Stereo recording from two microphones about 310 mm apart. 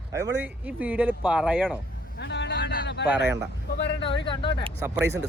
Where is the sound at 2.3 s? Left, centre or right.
Left.